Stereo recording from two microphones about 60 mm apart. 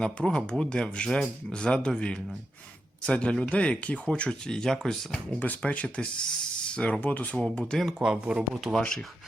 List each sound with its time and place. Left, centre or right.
0.0 s speech: centre
5.4 s speech: left
7.3 s speech: centre
8.0 s speech: centre
8.8 s speech: centre